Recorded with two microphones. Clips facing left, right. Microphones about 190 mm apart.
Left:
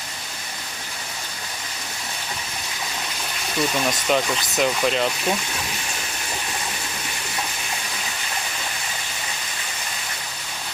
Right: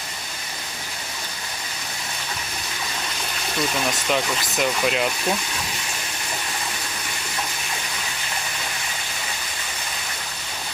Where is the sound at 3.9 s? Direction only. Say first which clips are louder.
Left 2 dB; centre (ahead or behind).